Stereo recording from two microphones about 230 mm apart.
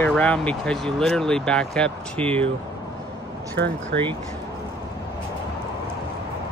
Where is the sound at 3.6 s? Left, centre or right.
Right.